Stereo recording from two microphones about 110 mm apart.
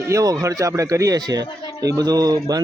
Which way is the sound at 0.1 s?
30° right (ahead or behind).